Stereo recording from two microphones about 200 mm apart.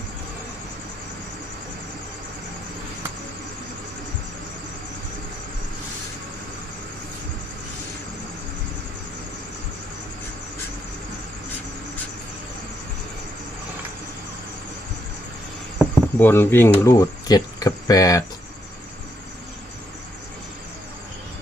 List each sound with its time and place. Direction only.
16.1 s speech: 10° left (ahead or behind)